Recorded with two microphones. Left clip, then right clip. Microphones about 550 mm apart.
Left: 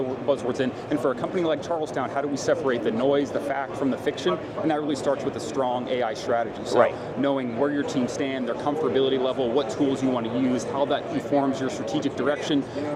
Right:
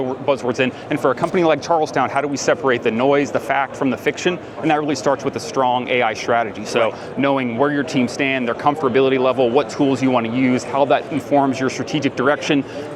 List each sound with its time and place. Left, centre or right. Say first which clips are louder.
0.3 s speech: right 7 dB; right